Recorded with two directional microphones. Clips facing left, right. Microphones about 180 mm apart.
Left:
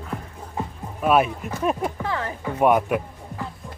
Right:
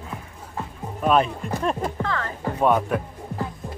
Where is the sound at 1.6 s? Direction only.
10° left (ahead or behind).